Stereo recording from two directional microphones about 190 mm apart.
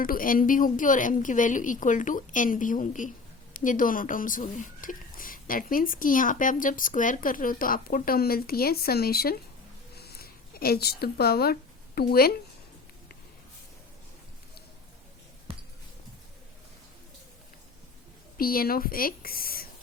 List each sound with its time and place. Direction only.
0.0 s speech: 45° left (ahead or behind)
9.9 s a sound: 55° left (ahead or behind)
11.9 s speech: 55° left (ahead or behind)
18.3 s speech: 50° left (ahead or behind)